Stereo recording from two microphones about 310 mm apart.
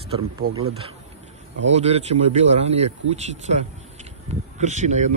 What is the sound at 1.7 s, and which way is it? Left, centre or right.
Speech, right.